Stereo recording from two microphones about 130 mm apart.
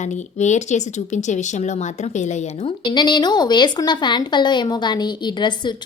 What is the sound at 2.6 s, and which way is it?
A woman's voice, 35° left (ahead or behind).